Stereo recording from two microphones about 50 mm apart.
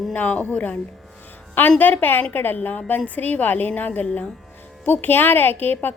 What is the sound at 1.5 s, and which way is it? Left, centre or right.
A woman's voice, left.